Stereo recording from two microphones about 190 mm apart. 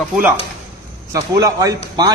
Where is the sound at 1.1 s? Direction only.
20° right (ahead or behind).